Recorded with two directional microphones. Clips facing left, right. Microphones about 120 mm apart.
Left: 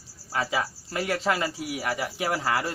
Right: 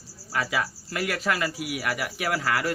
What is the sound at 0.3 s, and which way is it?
Speech, 25° left (ahead or behind).